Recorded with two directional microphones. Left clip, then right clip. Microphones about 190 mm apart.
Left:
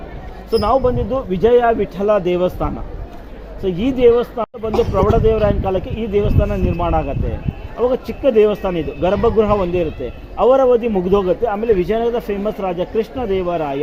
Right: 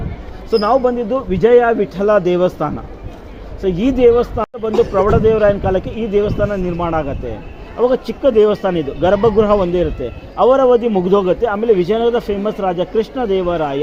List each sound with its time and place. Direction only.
0.5 s a man's voice: 20° right (ahead or behind)